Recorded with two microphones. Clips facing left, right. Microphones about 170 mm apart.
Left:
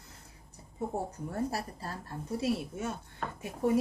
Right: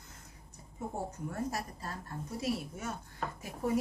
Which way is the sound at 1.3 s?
30° left (ahead or behind).